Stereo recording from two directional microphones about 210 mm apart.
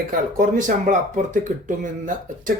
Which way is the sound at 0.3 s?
35° right (ahead or behind).